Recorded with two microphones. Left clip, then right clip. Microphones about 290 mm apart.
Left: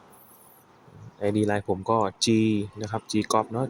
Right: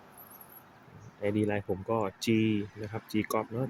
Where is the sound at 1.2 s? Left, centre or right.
Centre.